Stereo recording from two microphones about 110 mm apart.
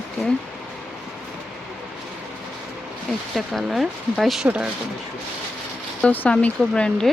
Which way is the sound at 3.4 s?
Centre (ahead or behind).